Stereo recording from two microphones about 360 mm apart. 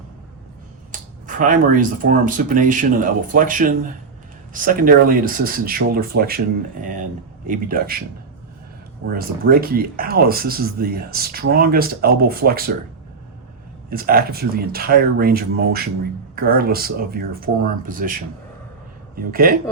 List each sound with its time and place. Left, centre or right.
1.4 s speech: right
7.4 s speech: right
9.1 s speech: right
13.9 s speech: right